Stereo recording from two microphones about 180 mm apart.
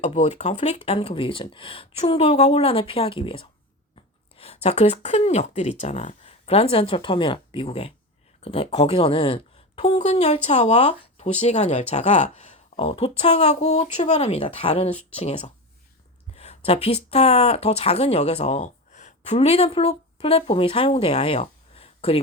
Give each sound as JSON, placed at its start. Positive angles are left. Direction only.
{"t": 0.0, "sound": "speech", "side_deg": 35}